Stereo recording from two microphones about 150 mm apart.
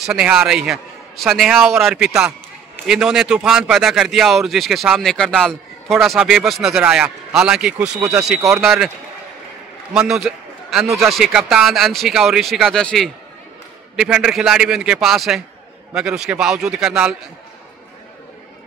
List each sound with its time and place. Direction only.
0.0 s speech: 5° right (ahead or behind)
9.9 s a man's voice: 5° right (ahead or behind)
10.9 s speech: 20° right (ahead or behind)
11.1 s speech: 5° right (ahead or behind)